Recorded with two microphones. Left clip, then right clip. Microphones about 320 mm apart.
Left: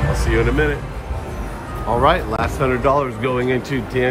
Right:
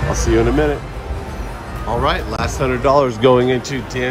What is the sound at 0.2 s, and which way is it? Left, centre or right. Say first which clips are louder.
Speech: right 3 dB; centre.